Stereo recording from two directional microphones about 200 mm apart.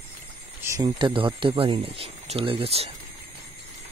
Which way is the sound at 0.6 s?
15° right (ahead or behind).